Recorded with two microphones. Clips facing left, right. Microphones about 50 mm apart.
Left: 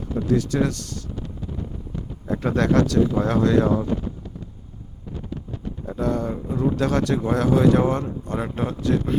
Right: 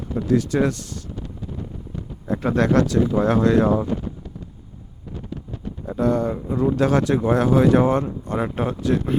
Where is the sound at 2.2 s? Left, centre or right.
Centre.